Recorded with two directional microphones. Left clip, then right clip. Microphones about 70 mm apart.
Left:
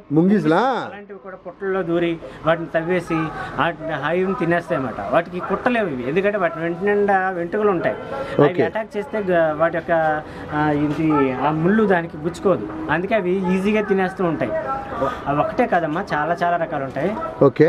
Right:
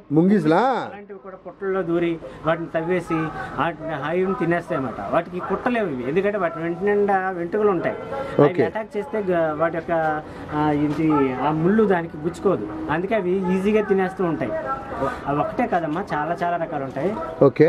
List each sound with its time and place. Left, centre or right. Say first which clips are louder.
0.1 s speech: left 1 dB; centre
1.7 s speech: left 2 dB; centre; by 17.1 s left
17.4 s speech: left 1 dB; centre